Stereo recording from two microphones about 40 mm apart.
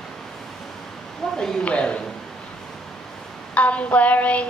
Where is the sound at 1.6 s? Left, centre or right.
Left.